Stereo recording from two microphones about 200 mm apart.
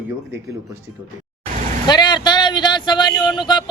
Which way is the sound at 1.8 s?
20° left (ahead or behind).